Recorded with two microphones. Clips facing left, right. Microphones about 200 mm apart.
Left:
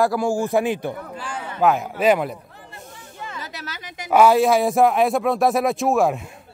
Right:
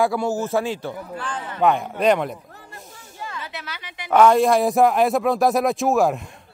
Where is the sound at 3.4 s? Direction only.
40° left (ahead or behind).